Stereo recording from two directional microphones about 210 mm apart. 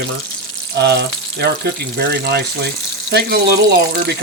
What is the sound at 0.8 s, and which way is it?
Speech, 50° right (ahead or behind).